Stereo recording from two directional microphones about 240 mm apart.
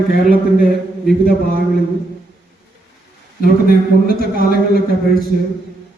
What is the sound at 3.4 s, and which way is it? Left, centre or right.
A man's voice, left.